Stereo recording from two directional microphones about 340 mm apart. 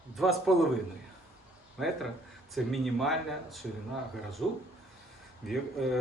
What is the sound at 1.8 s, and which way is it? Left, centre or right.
Speech, centre.